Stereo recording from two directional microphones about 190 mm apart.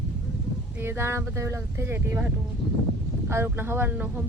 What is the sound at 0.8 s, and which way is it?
Speech, 10° right (ahead or behind).